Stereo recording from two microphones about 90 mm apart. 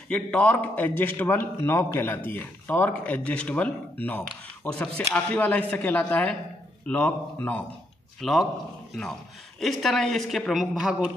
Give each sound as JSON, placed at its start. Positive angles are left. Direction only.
{"t": 0.1, "sound": "a man's voice", "side_deg": 15}
{"t": 8.2, "sound": "speech", "side_deg": 0}
{"t": 9.6, "sound": "speech", "side_deg": 0}